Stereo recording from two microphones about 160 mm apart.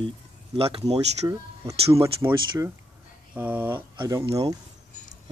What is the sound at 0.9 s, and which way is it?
Speech, 20° right (ahead or behind).